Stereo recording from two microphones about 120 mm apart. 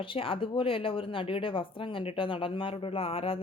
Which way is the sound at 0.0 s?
45° left (ahead or behind).